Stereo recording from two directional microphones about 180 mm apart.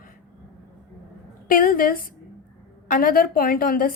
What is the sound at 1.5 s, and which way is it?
A woman's voice, 50° left (ahead or behind).